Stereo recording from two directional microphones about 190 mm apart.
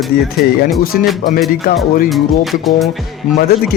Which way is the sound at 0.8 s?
50° left (ahead or behind).